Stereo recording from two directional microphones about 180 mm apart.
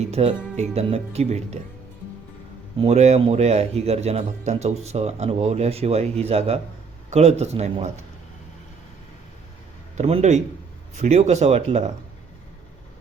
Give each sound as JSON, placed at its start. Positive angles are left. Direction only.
{"t": 0.1, "sound": "a man's voice", "side_deg": -35}
{"t": 2.8, "sound": "a man's voice", "side_deg": -40}
{"t": 10.0, "sound": "a man's voice", "side_deg": -35}